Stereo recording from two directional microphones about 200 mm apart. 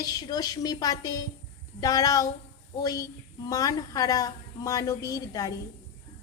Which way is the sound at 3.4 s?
15° left (ahead or behind).